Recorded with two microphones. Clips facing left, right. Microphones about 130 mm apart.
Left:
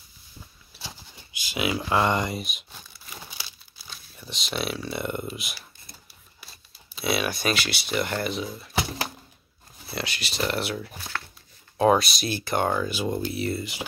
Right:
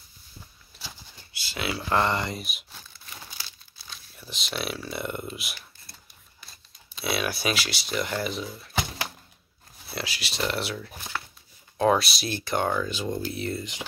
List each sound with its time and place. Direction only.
0.7 s a sound: 15° left (ahead or behind)
2.3 s speech: centre (ahead or behind)
3.1 s crumpling: 10° left (ahead or behind)
4.1 s speech: centre (ahead or behind)
9.8 s speech: centre (ahead or behind)